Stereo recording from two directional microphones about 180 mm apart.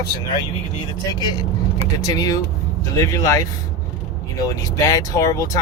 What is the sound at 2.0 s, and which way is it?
A man's voice, 20° left (ahead or behind).